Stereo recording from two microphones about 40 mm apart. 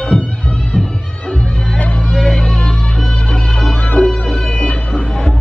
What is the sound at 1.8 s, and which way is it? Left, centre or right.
Music, left.